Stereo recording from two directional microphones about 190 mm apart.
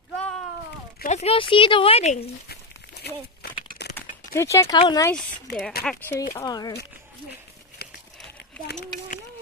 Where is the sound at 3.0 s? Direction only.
55° left (ahead or behind).